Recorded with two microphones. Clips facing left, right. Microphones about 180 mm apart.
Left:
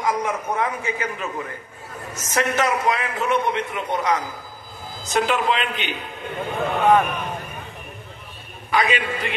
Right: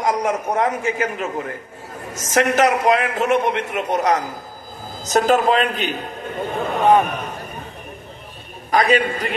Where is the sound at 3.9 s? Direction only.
40° right (ahead or behind).